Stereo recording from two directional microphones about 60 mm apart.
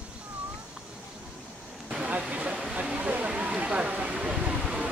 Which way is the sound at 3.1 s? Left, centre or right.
Right.